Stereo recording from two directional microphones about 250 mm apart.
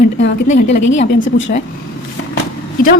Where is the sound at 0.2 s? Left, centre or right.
Left.